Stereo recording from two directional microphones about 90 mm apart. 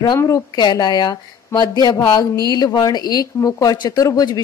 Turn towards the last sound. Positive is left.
turn(degrees=45)  # may be behind; listen again after turning